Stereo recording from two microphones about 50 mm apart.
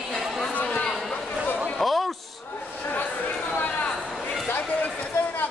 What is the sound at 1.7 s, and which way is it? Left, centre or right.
Basketball bounce, centre.